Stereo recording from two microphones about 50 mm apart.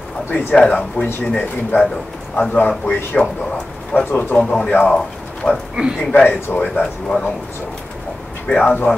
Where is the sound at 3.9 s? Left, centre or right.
Left.